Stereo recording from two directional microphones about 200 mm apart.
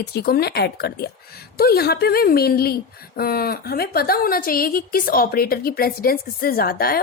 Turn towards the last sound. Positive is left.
turn(degrees=50)  # may be behind; listen again after turning